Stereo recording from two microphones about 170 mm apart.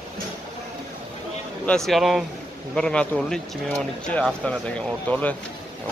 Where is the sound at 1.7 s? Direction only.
Centre (ahead or behind).